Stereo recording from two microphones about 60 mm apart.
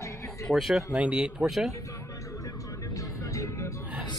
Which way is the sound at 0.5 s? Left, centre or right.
Centre.